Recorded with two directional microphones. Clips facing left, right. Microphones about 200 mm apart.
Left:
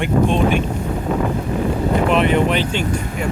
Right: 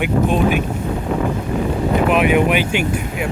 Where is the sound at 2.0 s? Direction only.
10° right (ahead or behind).